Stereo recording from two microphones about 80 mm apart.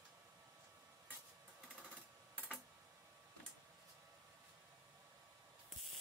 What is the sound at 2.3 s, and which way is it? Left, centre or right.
Computer keyboard, centre.